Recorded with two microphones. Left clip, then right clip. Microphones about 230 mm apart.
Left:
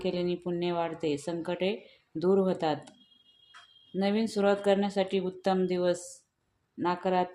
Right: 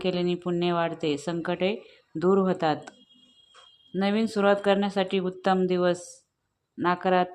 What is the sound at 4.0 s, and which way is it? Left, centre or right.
Speech, centre.